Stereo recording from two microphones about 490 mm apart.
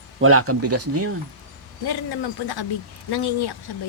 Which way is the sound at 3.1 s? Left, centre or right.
Left.